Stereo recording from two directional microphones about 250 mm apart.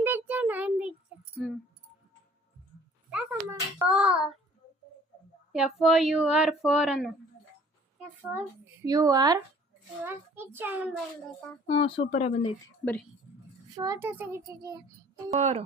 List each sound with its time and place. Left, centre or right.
0.3 s a sound: centre
3.1 s a sound: centre
5.5 s speech: centre
11.6 s speech: left
13.7 s speech: centre
15.3 s speech: right